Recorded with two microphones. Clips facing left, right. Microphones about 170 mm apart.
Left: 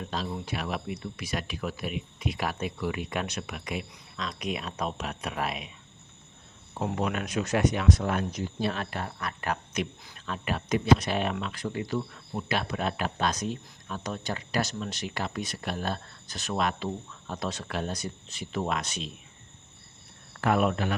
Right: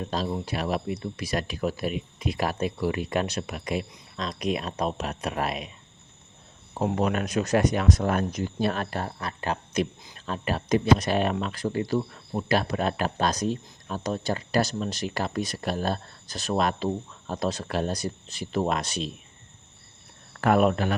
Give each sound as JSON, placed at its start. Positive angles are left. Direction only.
{"t": 0.0, "sound": "speech", "side_deg": -40}
{"t": 6.9, "sound": "speech", "side_deg": -40}
{"t": 20.4, "sound": "speech", "side_deg": -45}